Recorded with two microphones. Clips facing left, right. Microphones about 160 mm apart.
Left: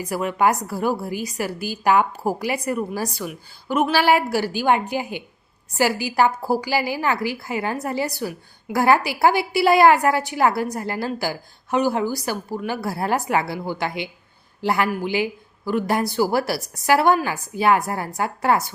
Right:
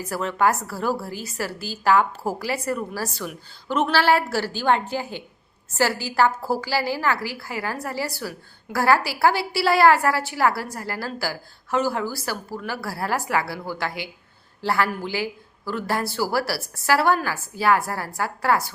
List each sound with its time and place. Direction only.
0.0 s a woman's voice: 15° left (ahead or behind)